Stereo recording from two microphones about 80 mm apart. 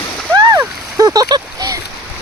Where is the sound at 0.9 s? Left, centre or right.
Right.